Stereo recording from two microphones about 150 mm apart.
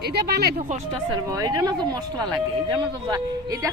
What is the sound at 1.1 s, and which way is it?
Speech, 25° right (ahead or behind).